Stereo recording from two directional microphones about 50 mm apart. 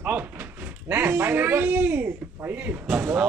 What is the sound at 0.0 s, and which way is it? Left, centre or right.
Speech, right.